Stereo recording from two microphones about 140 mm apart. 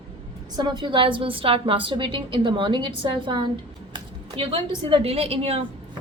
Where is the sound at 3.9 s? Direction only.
35° right (ahead or behind).